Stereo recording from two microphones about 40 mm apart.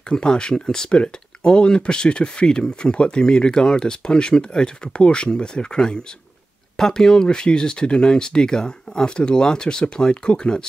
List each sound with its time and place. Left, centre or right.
0.1 s speech: left